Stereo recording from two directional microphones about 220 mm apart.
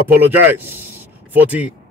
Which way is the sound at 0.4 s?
10° right (ahead or behind).